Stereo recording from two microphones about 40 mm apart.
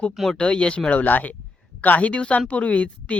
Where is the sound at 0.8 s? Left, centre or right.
Left.